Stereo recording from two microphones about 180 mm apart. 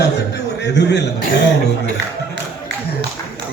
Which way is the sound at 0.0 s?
75° left (ahead or behind).